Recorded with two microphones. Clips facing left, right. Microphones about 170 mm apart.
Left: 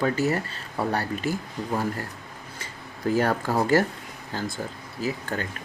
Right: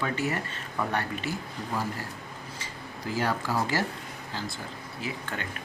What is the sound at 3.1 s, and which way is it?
Speech, 50° left (ahead or behind).